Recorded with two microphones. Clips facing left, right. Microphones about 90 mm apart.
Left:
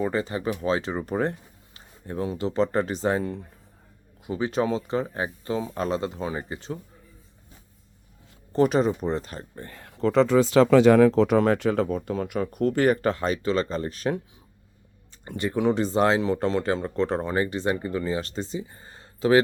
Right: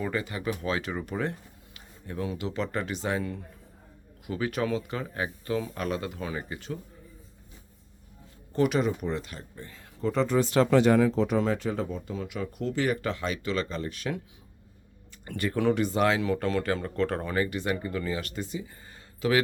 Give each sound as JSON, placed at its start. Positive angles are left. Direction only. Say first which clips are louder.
{"t": 0.0, "sound": "speech", "louder": "left 5 dB", "side_deg": 30}
{"t": 8.5, "sound": "speech", "louder": "left 4 dB", "side_deg": 35}
{"t": 9.6, "sound": "speech", "louder": "left 5 dB", "side_deg": 60}
{"t": 15.2, "sound": "speech", "louder": "left 3 dB", "side_deg": 25}